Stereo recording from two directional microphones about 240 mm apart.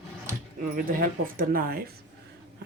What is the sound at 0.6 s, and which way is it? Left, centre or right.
Speech, right.